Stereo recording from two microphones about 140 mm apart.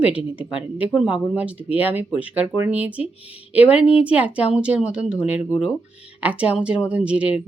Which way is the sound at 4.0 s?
10° right (ahead or behind).